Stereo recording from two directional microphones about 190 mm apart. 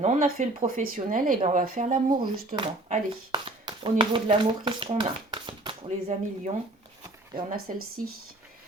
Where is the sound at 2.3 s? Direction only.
50° right (ahead or behind).